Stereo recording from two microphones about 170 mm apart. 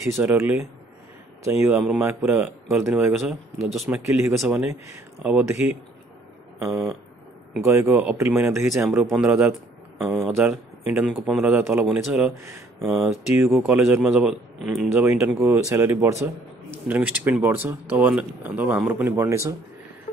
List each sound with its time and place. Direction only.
0.0 s speech: 5° right (ahead or behind)
9.0 s a man's voice: centre (ahead or behind)
13.0 s speech: 15° right (ahead or behind)